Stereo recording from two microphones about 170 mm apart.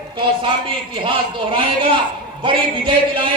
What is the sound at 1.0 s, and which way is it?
A man's voice, 30° right (ahead or behind).